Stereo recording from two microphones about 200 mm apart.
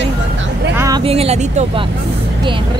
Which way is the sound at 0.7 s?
15° right (ahead or behind).